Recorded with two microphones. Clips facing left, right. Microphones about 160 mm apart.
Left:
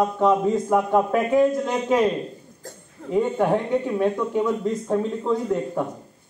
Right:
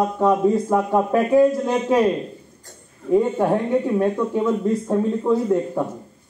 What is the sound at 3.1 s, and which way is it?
Speech, 15° right (ahead or behind).